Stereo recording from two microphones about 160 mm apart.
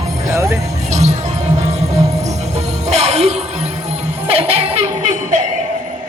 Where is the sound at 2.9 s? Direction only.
40° right (ahead or behind).